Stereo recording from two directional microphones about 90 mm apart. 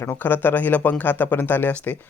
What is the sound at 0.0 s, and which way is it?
Speech, 25° left (ahead or behind).